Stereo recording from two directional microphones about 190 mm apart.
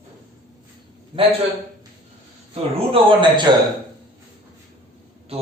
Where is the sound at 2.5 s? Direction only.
30° right (ahead or behind).